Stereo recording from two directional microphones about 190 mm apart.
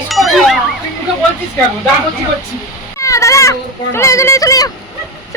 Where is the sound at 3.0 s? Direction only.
15° left (ahead or behind).